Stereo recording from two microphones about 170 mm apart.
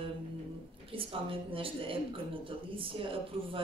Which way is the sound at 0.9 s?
30° right (ahead or behind).